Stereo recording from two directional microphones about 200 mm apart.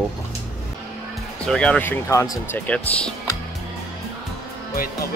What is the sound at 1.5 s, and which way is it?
Speech, 5° left (ahead or behind).